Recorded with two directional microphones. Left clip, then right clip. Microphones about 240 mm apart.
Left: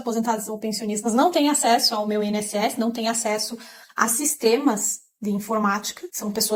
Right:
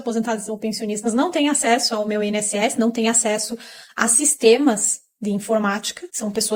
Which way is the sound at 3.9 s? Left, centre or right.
Right.